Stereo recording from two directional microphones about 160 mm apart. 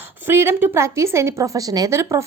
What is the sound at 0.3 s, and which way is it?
A woman's voice, 15° right (ahead or behind).